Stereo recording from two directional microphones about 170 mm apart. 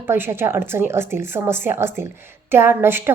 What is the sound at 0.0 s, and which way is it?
Speech, 15° right (ahead or behind).